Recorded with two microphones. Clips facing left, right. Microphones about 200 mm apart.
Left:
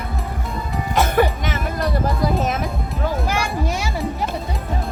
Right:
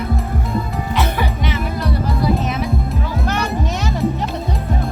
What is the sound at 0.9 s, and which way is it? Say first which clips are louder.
Music: left 5 dB; 45° left (ahead or behind).